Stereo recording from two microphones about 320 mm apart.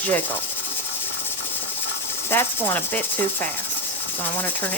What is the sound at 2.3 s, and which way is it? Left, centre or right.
Speech, centre.